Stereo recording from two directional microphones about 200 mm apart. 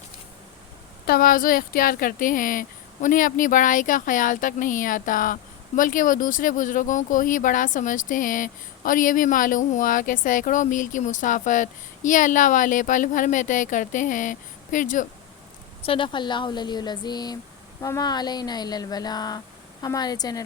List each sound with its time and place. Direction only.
1.0 s speech: 50° left (ahead or behind)
15.8 s speech: 25° left (ahead or behind)